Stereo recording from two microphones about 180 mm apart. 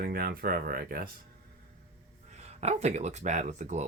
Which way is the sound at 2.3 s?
35° right (ahead or behind).